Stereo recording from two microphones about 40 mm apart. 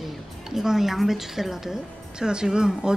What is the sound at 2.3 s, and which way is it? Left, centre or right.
Speech, centre.